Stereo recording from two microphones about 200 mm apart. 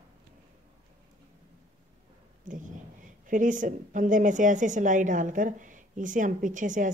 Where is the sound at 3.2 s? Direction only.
40° right (ahead or behind).